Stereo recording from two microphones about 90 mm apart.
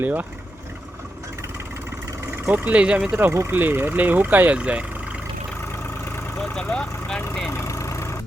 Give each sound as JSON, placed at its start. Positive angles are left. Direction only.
{"t": 0.0, "sound": "speech", "side_deg": -15}
{"t": 2.5, "sound": "speech", "side_deg": -15}
{"t": 6.4, "sound": "speech", "side_deg": 10}
{"t": 7.5, "sound": "vehicle", "side_deg": 35}